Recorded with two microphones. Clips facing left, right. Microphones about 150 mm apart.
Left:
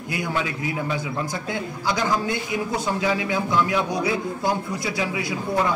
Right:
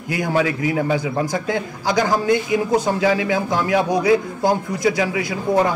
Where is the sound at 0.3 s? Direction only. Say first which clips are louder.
Right 9 dB; 45° right (ahead or behind).